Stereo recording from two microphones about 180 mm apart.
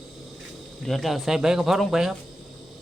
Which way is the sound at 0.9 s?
Centre (ahead or behind).